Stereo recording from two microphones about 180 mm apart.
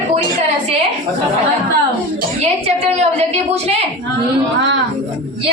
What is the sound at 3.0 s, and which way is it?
Speech, 35° right (ahead or behind).